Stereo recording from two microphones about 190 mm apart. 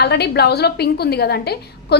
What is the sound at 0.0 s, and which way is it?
A woman's voice, 60° left (ahead or behind).